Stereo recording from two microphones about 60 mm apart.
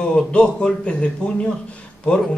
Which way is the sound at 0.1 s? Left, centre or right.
Centre.